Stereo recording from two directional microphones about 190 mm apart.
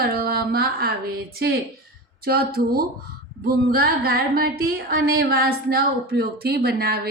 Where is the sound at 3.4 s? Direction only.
55° right (ahead or behind).